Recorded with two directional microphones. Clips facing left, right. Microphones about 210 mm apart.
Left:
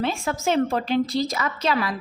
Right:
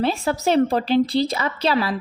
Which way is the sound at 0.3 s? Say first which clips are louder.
Right 4 dB; 35° right (ahead or behind).